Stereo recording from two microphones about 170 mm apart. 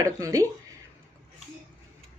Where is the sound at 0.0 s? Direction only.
20° right (ahead or behind).